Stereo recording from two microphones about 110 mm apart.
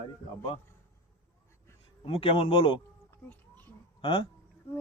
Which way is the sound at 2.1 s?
55° left (ahead or behind).